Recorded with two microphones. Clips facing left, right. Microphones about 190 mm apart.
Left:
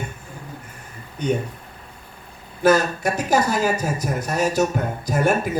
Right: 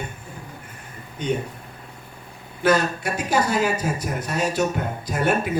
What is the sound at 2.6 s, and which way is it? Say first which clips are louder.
Speech: left 3 dB; 40° left (ahead or behind).